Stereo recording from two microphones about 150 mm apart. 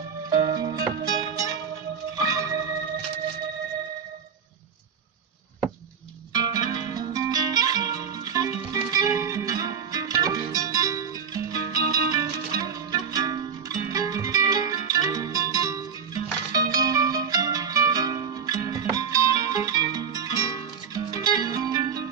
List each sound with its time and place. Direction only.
0.3 s music: 30° right (ahead or behind)
6.3 s music: 25° right (ahead or behind)